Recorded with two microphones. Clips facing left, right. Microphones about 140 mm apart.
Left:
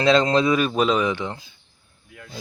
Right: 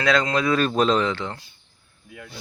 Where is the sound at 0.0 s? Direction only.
25° left (ahead or behind).